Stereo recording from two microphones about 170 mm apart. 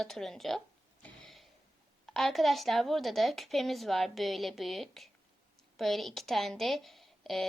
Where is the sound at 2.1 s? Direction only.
Centre (ahead or behind).